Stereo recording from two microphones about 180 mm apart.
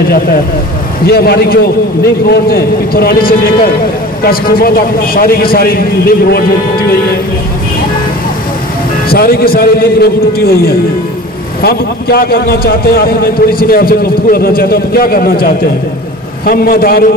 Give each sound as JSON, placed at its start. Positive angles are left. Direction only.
{"t": 1.0, "sound": "a man's voice", "side_deg": 60}
{"t": 9.1, "sound": "a man's voice", "side_deg": 55}
{"t": 11.6, "sound": "a man's voice", "side_deg": 60}